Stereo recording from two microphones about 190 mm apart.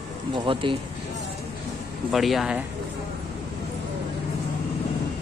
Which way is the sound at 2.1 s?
Centre (ahead or behind).